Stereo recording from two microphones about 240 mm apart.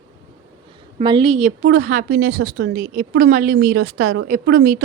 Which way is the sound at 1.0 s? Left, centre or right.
Right.